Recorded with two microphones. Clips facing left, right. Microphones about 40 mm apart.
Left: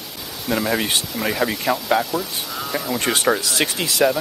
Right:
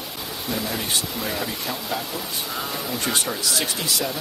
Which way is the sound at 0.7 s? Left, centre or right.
Left.